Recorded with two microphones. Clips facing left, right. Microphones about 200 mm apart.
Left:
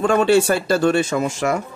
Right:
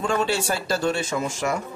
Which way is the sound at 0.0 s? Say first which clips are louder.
Left 9 dB; 60° left (ahead or behind).